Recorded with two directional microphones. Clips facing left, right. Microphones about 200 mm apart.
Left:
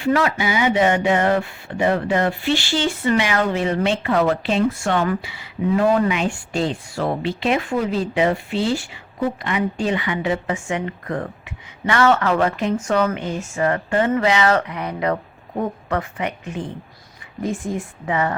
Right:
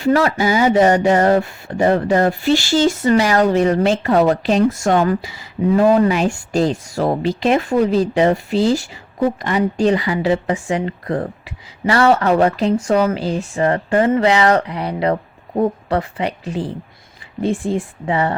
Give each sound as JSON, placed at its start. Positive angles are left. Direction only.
{"t": 0.0, "sound": "speech", "side_deg": -40}